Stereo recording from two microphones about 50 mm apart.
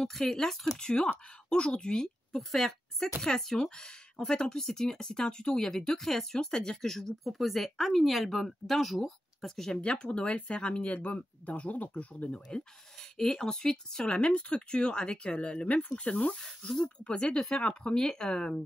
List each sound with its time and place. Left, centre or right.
0.0 s speech: centre
7.2 s speech: centre
9.8 s speech: centre
12.4 s speech: centre
16.2 s speech: centre